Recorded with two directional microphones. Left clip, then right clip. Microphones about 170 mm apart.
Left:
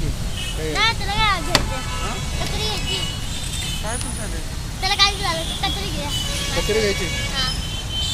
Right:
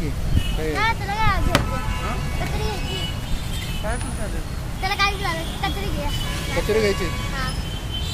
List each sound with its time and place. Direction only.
0.7 s vehicle: 25° left (ahead or behind)
4.8 s speech: 15° left (ahead or behind)
6.5 s speech: 5° right (ahead or behind)